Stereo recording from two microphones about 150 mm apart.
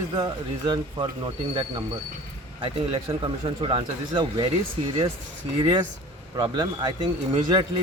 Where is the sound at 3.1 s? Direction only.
35° right (ahead or behind).